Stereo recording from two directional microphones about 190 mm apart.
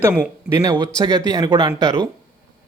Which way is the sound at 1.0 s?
20° right (ahead or behind).